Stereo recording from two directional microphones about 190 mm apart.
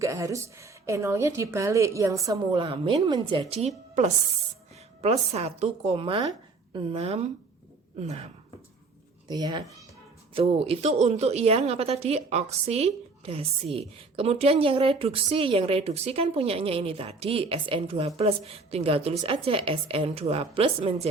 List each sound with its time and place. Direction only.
0.0 s a woman's voice: 15° right (ahead or behind)
4.9 s speech: 35° right (ahead or behind)
9.3 s speech: 20° right (ahead or behind)